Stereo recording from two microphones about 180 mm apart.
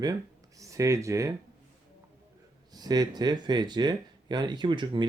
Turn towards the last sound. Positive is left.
turn(degrees=-25)  # may be behind; listen again after turning